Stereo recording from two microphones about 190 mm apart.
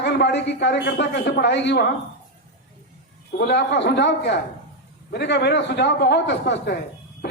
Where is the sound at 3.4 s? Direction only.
65° left (ahead or behind).